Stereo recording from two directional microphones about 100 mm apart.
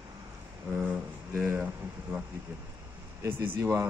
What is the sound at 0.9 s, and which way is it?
Speech, 20° right (ahead or behind).